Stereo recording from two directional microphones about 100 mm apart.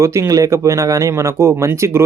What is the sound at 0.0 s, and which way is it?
Speech, 30° right (ahead or behind).